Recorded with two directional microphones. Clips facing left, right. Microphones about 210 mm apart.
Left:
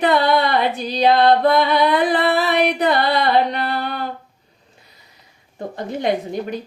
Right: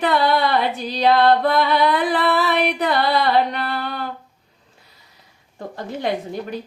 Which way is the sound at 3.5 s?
45° left (ahead or behind).